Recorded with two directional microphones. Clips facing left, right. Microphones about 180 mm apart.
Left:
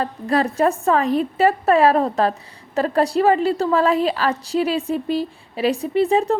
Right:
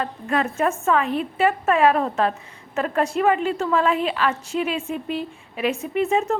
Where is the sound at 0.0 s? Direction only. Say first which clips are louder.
Left 4 dB; 35° left (ahead or behind).